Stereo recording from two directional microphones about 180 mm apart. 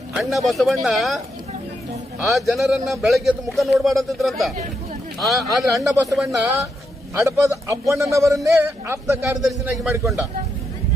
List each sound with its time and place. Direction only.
0.2 s speech: centre (ahead or behind)
2.2 s speech: centre (ahead or behind)
7.2 s a man's voice: 15° right (ahead or behind)
9.4 s speech: centre (ahead or behind)